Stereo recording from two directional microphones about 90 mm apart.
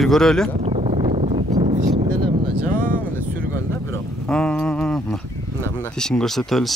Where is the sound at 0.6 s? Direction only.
90° right.